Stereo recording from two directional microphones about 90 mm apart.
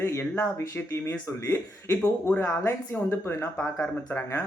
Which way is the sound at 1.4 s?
25° left (ahead or behind).